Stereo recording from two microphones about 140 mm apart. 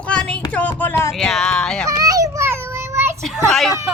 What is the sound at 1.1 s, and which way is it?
Speech, centre (ahead or behind).